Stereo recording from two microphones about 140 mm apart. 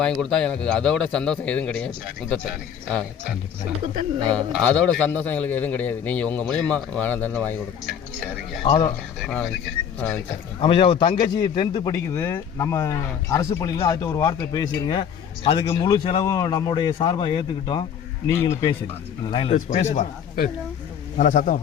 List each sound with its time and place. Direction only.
0.0 s speech: 5° left (ahead or behind)
3.9 s speech: 30° right (ahead or behind)
4.6 s a man's voice: 10° left (ahead or behind)
9.3 s speech: 5° left (ahead or behind)
10.6 s speech: 40° left (ahead or behind)
11.9 s speech: 20° left (ahead or behind)
15.4 s speech: 40° left (ahead or behind)
16.2 s speech: 25° left (ahead or behind)
18.3 s speech: 20° left (ahead or behind)
19.2 s speech: 35° left (ahead or behind)
19.5 s speech: 60° left (ahead or behind)
21.2 s speech: 65° left (ahead or behind)